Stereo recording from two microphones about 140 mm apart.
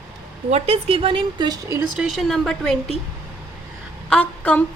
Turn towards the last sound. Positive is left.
turn(degrees=10)  # may be behind; listen again after turning